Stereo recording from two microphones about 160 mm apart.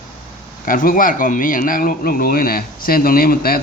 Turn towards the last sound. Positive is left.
turn(degrees=65)  # may be behind; listen again after turning